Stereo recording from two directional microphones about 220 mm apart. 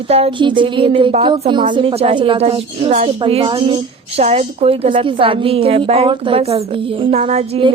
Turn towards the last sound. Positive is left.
turn(degrees=-25)  # may be behind; listen again after turning